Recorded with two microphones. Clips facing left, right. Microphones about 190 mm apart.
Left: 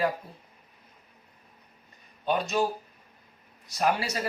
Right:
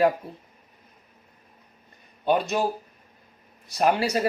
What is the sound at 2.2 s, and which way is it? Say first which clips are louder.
Speech: right 5 dB; 60° right (ahead or behind).